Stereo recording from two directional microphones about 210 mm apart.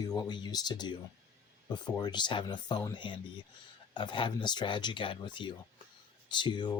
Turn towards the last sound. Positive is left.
turn(degrees=20)  # may be behind; listen again after turning